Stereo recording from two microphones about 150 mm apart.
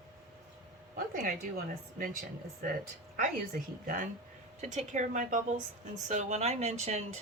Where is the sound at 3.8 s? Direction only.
65° right (ahead or behind).